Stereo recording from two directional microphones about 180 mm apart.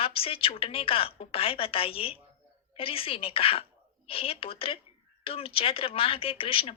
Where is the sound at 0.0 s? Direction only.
30° left (ahead or behind).